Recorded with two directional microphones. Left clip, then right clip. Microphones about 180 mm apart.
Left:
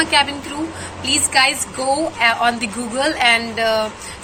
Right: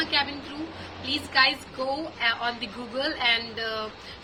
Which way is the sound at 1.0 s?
15° right (ahead or behind).